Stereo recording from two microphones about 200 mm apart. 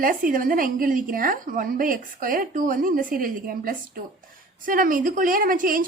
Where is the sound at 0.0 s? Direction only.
45° right (ahead or behind).